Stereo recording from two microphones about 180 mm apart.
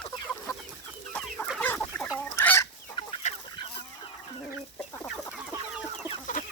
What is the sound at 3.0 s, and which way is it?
Chicken, 30° left (ahead or behind).